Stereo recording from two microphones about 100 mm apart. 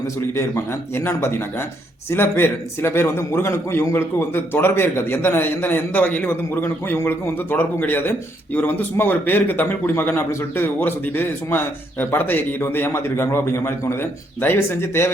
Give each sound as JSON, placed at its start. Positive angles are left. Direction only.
{"t": 0.2, "sound": "speech", "side_deg": 25}